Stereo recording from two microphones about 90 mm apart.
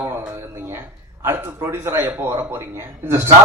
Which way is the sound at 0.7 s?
25° right (ahead or behind).